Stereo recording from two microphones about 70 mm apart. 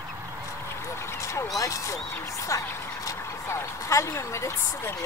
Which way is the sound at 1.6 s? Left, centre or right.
Left.